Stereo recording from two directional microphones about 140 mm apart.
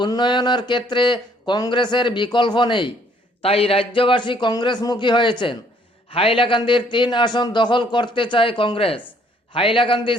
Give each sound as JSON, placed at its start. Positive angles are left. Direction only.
{"t": 0.0, "sound": "speech", "side_deg": 35}